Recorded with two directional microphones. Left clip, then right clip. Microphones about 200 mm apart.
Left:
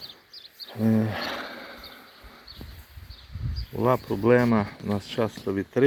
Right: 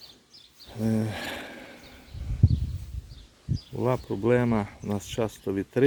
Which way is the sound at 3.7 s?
10° right (ahead or behind).